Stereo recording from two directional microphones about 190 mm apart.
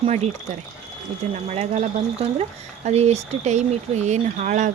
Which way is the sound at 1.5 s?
35° right (ahead or behind).